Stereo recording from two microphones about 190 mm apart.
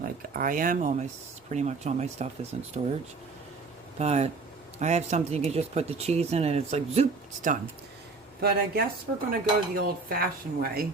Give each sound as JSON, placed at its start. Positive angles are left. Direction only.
{"t": 0.0, "sound": "dishes", "side_deg": -45}
{"t": 1.5, "sound": "speech", "side_deg": -35}
{"t": 3.9, "sound": "speech", "side_deg": -35}
{"t": 8.4, "sound": "speech", "side_deg": -55}
{"t": 9.3, "sound": "dishes", "side_deg": -50}